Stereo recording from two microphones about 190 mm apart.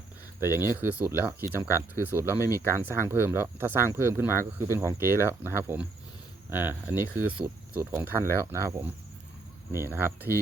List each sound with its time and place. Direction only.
0.6 s speech: 10° right (ahead or behind)
2.4 s speech: 15° left (ahead or behind)
2.7 s speech: 10° right (ahead or behind)